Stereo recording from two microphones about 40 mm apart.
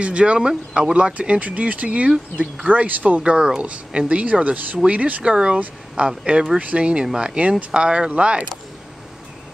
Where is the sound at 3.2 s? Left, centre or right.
Right.